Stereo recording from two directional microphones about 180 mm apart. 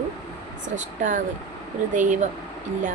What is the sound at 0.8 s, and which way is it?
Speech, 45° right (ahead or behind).